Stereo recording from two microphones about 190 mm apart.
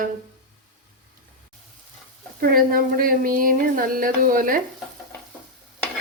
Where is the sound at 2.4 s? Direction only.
50° right (ahead or behind).